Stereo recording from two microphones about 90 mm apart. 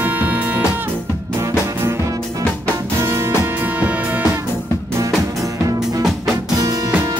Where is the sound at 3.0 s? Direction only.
35° right (ahead or behind).